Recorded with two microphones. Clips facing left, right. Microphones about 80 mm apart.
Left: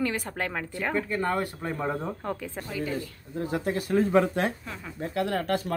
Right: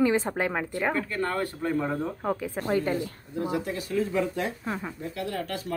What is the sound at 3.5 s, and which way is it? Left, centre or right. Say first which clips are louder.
Speech: left 5 dB; left.